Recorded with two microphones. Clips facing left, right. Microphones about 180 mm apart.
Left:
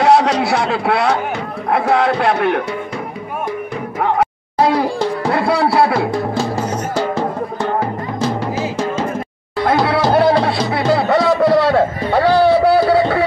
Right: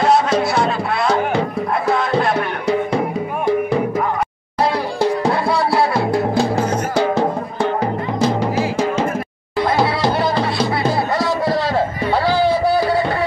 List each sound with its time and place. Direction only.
0.0 s speech: 75° left (ahead or behind)
1.7 s music: 70° left (ahead or behind)
5.3 s music: 65° left (ahead or behind)
6.1 s music: 10° right (ahead or behind)
8.5 s music: 15° right (ahead or behind)
9.7 s music: 60° left (ahead or behind)